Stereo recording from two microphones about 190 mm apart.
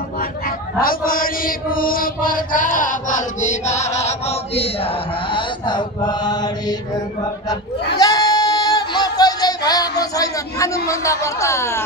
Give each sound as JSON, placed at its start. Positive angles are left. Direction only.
{"t": 0.7, "sound": "mantra", "side_deg": 50}
{"t": 5.3, "sound": "chant", "side_deg": 25}
{"t": 8.0, "sound": "music", "side_deg": 20}